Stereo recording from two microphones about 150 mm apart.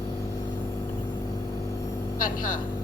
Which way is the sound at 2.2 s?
65° left (ahead or behind).